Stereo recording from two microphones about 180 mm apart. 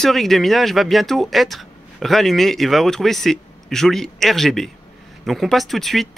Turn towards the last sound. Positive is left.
turn(degrees=0)  # may be behind; listen again after turning